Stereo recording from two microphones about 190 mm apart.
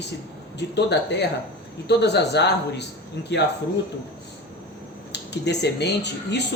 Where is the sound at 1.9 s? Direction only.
65° left (ahead or behind).